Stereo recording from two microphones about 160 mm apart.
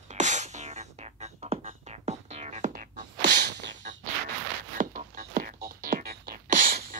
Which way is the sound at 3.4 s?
90° right.